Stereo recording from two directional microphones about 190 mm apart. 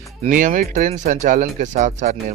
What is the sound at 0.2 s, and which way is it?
Speech, 45° right (ahead or behind).